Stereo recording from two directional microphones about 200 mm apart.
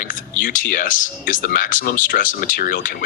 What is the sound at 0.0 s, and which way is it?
Speech, 45° left (ahead or behind).